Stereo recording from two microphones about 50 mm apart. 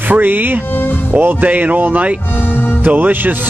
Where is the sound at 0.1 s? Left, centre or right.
Right.